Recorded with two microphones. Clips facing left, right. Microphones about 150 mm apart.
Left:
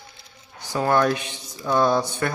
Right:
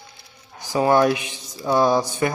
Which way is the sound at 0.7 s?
15° right (ahead or behind).